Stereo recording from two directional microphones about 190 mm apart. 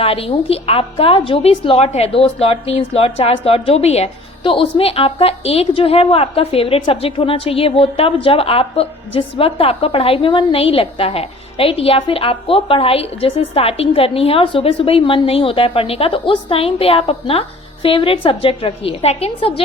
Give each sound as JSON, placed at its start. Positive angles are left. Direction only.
{"t": 0.0, "sound": "a woman's voice", "side_deg": 30}